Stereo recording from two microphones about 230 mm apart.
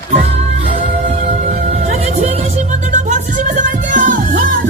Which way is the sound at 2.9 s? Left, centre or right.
Right.